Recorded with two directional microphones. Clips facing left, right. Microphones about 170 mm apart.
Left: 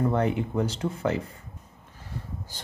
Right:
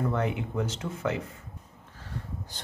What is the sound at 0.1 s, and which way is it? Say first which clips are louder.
Speech: left 4 dB; 35° left (ahead or behind).